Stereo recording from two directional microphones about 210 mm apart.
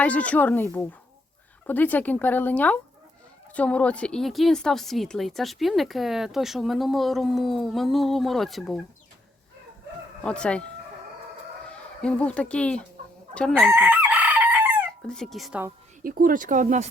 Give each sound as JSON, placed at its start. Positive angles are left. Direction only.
{"t": 0.0, "sound": "a woman's voice", "side_deg": 5}
{"t": 10.2, "sound": "a woman's voice", "side_deg": 5}
{"t": 11.7, "sound": "a woman's voice", "side_deg": 5}
{"t": 13.7, "sound": "chicken", "side_deg": -10}
{"t": 15.0, "sound": "a woman's voice", "side_deg": 0}
{"t": 16.0, "sound": "speech", "side_deg": -40}